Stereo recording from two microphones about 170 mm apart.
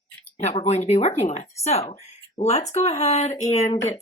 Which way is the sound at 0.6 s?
45° left (ahead or behind).